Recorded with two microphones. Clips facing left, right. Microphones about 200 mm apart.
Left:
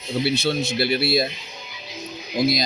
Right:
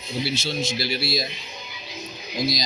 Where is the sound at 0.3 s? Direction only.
60° left (ahead or behind).